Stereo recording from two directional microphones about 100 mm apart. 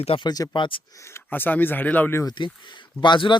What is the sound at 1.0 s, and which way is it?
Speech, 25° left (ahead or behind).